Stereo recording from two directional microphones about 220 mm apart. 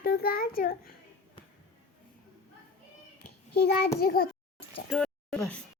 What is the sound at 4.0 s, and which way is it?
Speech, 45° left (ahead or behind).